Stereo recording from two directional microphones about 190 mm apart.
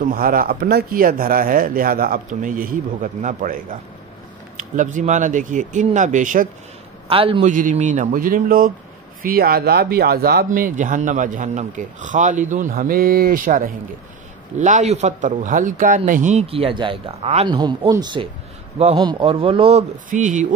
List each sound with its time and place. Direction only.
0.0 s speech: 50° right (ahead or behind)
7.1 s speech: 30° right (ahead or behind)
7.5 s speech: 40° right (ahead or behind)
17.6 s speech: 20° right (ahead or behind)
20.1 s speech: 40° right (ahead or behind)